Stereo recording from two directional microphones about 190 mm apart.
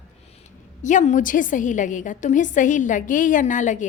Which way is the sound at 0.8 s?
40° left (ahead or behind).